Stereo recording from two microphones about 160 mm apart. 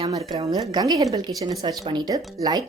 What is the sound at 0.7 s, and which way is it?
Speech, 25° right (ahead or behind).